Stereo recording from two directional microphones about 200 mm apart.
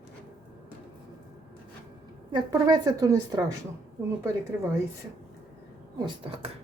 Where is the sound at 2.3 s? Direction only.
20° right (ahead or behind).